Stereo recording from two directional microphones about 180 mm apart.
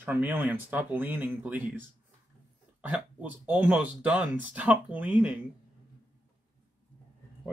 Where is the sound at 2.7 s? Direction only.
5° right (ahead or behind).